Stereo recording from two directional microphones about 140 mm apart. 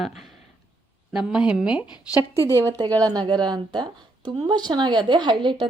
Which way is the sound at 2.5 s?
20° right (ahead or behind).